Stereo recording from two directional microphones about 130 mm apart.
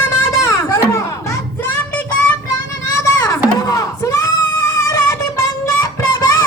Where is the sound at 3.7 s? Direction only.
25° left (ahead or behind).